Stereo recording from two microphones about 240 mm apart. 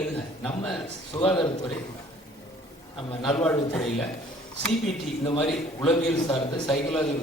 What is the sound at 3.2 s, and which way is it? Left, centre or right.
Speech, centre.